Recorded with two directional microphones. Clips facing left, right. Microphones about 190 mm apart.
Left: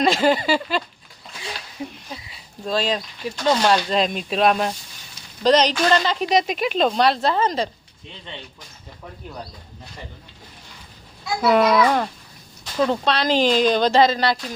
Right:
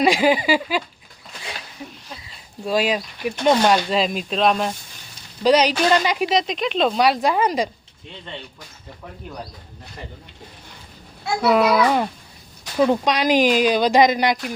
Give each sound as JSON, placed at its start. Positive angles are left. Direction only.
{"t": 0.0, "sound": "speech", "side_deg": -15}
{"t": 1.8, "sound": "a sound", "side_deg": 25}
{"t": 2.6, "sound": "speech", "side_deg": -10}
{"t": 3.9, "sound": "speech", "side_deg": 0}
{"t": 5.4, "sound": "speech", "side_deg": -10}
{"t": 6.3, "sound": "speech", "side_deg": 0}
{"t": 11.4, "sound": "speech", "side_deg": -5}